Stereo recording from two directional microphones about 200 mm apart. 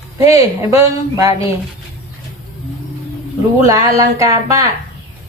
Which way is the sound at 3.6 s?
15° right (ahead or behind).